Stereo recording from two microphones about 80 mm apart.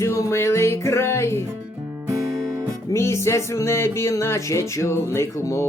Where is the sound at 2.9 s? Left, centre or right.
Left.